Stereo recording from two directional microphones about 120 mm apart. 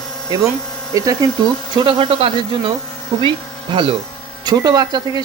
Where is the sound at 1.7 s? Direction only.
50° right (ahead or behind).